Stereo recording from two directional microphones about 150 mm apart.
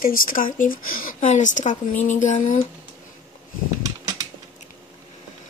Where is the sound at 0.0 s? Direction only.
70° left (ahead or behind).